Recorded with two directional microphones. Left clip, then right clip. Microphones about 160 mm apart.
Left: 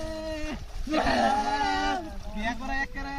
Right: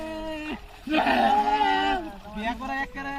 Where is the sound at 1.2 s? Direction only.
25° left (ahead or behind).